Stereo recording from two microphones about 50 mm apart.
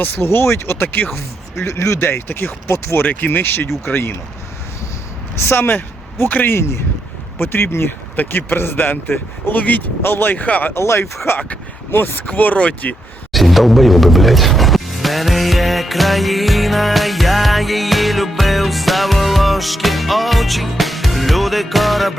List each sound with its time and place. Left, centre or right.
0.0 s speech: left
1.6 s speech: left
2.0 s speech: left
5.4 s speech: left
6.2 s speech: left
6.5 s speech: left
7.3 s speech: left
7.9 s speech: left
10.0 s speech: left
10.3 s speech: left
10.8 s speech: left
12.2 s speech: left
13.3 s music: centre